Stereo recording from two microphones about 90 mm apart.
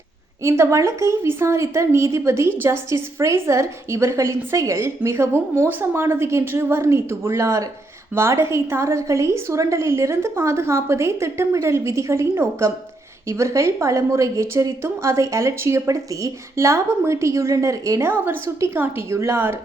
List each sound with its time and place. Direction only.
0.4 s a woman's voice: 30° right (ahead or behind)
18.1 s a woman's voice: 25° right (ahead or behind)